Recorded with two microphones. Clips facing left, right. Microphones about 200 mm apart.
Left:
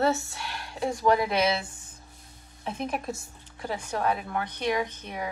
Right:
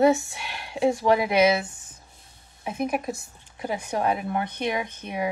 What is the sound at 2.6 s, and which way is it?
A woman's voice, 10° right (ahead or behind).